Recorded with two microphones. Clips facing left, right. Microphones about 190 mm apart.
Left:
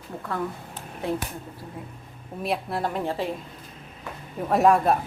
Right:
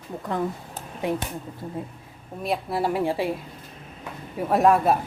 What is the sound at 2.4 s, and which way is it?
Speech, centre (ahead or behind).